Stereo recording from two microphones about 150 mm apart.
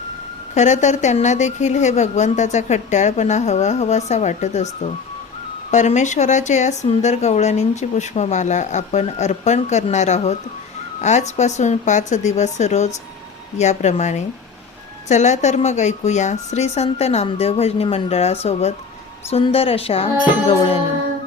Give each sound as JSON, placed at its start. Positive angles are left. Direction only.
{"t": 0.5, "sound": "speech", "side_deg": 50}